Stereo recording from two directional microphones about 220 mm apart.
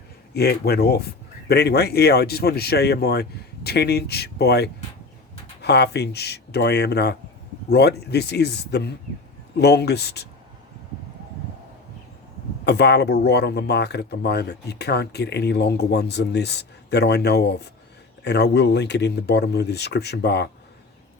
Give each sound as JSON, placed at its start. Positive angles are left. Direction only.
{"t": 0.3, "sound": "speech", "side_deg": 45}
{"t": 12.6, "sound": "speech", "side_deg": 50}